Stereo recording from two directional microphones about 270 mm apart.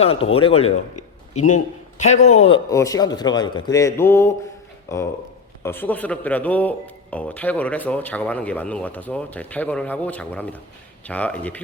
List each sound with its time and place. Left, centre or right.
0.0 s speech: left
2.1 s a man's voice: left
2.4 s a man's voice: centre